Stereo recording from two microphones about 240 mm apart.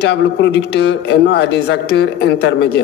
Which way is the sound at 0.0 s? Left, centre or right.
Left.